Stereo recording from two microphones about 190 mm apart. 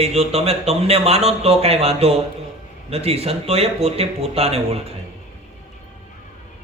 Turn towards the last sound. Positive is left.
turn(degrees=-30)  # may be behind; listen again after turning